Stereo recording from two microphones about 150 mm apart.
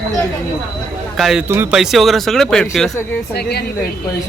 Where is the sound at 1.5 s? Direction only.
15° right (ahead or behind).